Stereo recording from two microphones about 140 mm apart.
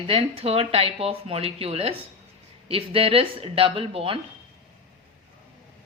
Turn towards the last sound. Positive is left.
turn(degrees=-40)  # may be behind; listen again after turning